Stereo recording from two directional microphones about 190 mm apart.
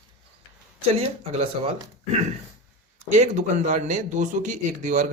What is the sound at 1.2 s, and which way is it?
Speech, 30° right (ahead or behind).